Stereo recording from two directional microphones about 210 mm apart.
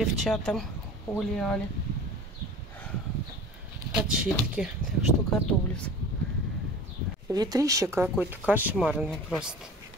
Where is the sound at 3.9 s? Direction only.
5° right (ahead or behind).